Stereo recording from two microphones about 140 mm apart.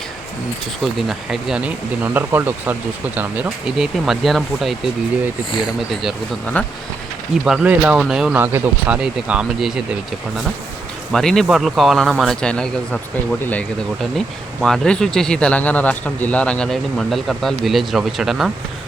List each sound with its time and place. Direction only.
0.9 s speech: centre (ahead or behind)
3.9 s a man's voice: centre (ahead or behind)
5.5 s speech: 35° left (ahead or behind)
5.9 s a man's voice: centre (ahead or behind)
7.4 s a man's voice: 5° right (ahead or behind)
11.1 s a man's voice: centre (ahead or behind)